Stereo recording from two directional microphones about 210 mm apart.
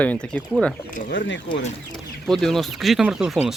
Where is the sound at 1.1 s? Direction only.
60° left (ahead or behind).